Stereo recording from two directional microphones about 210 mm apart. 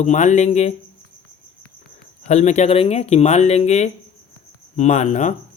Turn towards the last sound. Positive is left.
turn(degrees=35)  # may be behind; listen again after turning